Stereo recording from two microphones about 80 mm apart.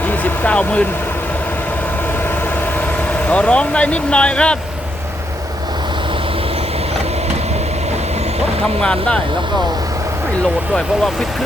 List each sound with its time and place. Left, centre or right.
0.1 s speech: centre
3.2 s speech: centre
8.8 s speech: centre